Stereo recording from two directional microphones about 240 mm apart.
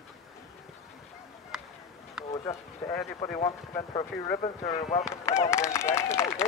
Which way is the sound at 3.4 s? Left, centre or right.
Left.